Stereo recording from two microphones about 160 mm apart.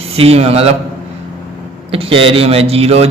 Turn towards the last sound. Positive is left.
turn(degrees=-40)  # may be behind; listen again after turning